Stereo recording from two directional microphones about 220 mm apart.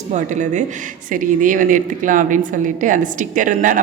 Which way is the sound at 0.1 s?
35° right (ahead or behind).